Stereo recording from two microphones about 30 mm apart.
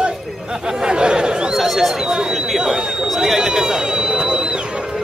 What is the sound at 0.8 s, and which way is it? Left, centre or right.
Chatter, right.